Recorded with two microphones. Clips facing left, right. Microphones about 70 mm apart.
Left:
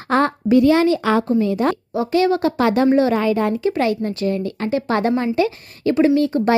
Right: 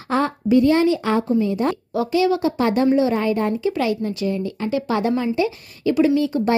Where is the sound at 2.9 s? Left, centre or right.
Left.